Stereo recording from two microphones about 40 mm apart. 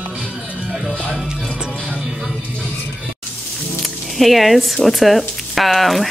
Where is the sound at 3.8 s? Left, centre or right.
Centre.